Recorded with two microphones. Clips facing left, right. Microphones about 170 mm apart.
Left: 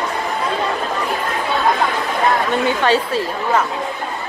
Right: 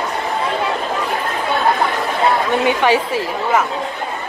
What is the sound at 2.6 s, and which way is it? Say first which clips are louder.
Chatter: right 2 dB; 15° right (ahead or behind).